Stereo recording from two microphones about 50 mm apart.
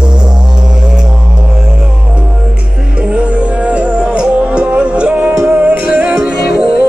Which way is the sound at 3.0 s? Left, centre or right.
Right.